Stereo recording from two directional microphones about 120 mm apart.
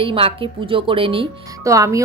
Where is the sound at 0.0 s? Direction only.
50° right (ahead or behind).